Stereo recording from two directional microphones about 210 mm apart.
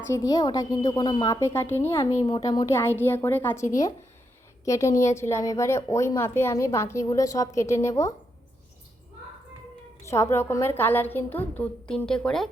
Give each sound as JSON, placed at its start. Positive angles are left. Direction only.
{"t": 0.1, "sound": "a woman's voice", "side_deg": 15}
{"t": 10.0, "sound": "a woman's voice", "side_deg": 15}